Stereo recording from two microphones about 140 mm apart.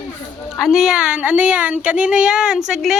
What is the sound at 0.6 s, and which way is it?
Speech, centre (ahead or behind).